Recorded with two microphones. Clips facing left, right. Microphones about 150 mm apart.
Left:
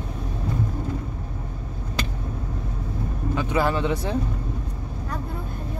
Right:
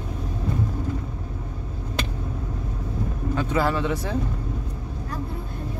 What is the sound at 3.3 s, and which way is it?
Speech, 15° left (ahead or behind).